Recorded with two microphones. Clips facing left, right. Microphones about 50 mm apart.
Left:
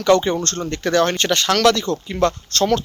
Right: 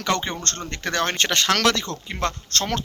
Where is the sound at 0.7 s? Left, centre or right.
Right.